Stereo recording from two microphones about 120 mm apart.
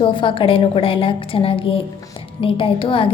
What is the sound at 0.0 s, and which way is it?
A woman's voice, 40° left (ahead or behind).